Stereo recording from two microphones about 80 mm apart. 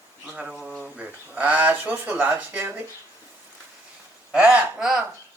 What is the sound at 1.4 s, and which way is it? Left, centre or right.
Speech, right.